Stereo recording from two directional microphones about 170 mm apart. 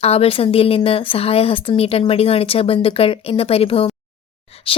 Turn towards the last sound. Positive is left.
turn(degrees=30)  # may be behind; listen again after turning